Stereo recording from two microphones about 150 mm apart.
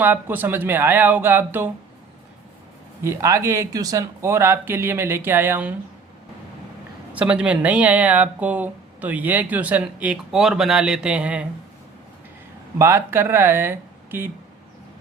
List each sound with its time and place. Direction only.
0.0 s speech: 15° right (ahead or behind)
3.0 s speech: 20° right (ahead or behind)
7.1 s speech: 10° right (ahead or behind)
12.8 s speech: 15° right (ahead or behind)